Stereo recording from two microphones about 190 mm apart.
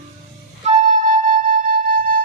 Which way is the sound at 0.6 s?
45° right (ahead or behind).